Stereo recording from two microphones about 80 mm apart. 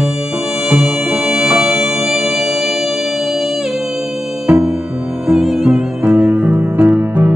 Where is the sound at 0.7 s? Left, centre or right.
Centre.